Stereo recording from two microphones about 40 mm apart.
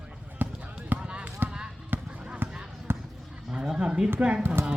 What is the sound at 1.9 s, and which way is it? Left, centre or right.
Honk, right.